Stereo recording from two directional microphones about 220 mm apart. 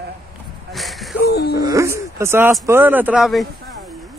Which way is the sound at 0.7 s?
Centre (ahead or behind).